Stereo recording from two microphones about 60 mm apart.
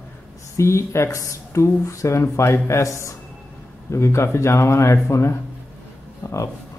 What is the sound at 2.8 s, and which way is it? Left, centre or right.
Speech, left.